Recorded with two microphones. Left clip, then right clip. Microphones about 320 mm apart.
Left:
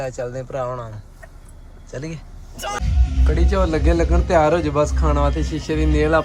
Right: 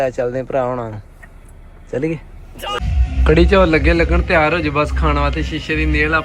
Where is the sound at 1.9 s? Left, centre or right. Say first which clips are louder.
Right 11 dB; centre.